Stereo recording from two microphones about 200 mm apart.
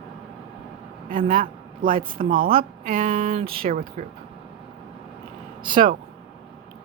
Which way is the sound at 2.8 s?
30° right (ahead or behind).